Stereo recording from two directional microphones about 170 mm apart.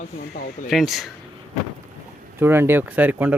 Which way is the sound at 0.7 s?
Centre (ahead or behind).